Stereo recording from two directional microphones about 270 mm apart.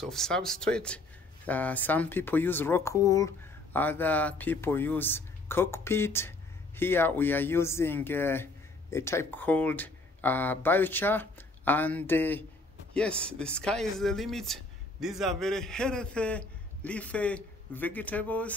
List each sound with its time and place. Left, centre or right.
0.0 s speech: centre